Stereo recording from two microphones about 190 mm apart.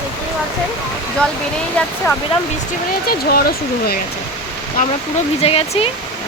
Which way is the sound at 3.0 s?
50° left (ahead or behind).